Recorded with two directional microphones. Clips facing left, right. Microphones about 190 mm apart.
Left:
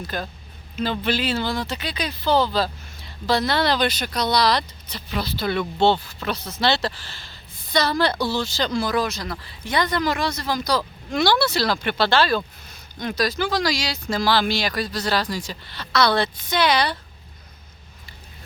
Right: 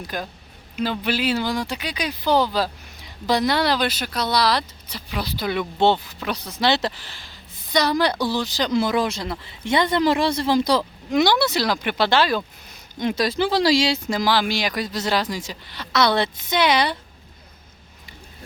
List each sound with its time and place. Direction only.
0.0 s a woman's voice: 10° right (ahead or behind)
14.1 s speech: 15° right (ahead or behind)